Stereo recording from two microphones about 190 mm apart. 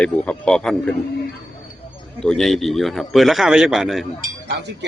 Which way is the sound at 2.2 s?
5° left (ahead or behind).